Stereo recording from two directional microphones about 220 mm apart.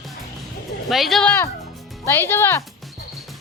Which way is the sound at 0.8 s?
Centre (ahead or behind).